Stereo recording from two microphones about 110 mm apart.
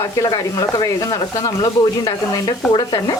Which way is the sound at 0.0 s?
35° left (ahead or behind).